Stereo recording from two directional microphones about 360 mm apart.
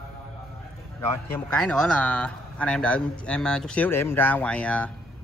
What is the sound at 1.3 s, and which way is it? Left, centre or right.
Speech, centre.